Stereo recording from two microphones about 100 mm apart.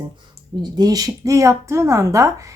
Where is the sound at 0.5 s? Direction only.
45° right (ahead or behind).